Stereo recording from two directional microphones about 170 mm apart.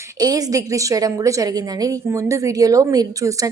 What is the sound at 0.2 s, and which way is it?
A woman's voice, 20° right (ahead or behind).